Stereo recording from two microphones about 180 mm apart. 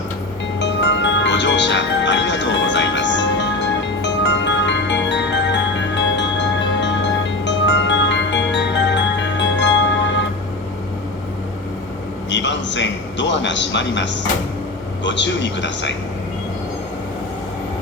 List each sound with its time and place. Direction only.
0.6 s music: 80° left
12.3 s a sound: 80° left
15.0 s a man's voice: 85° left